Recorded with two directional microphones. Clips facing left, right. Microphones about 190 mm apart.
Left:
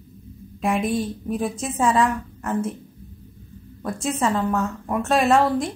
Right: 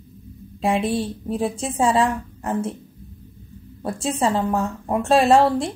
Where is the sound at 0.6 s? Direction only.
30° right (ahead or behind).